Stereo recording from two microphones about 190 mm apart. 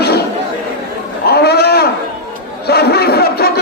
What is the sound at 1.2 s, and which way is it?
Livestock, 55° left (ahead or behind).